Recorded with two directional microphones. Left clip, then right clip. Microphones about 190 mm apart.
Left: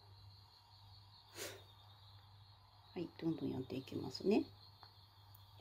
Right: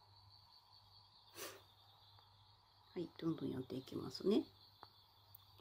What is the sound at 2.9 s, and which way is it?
Speech, 15° right (ahead or behind).